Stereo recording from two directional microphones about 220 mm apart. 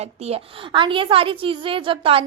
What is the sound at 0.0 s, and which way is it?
A woman's voice, 30° right (ahead or behind).